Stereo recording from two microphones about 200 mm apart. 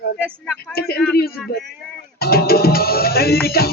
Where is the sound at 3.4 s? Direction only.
50° left (ahead or behind).